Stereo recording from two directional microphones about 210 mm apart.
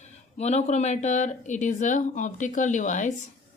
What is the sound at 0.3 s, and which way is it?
Speech, 30° left (ahead or behind).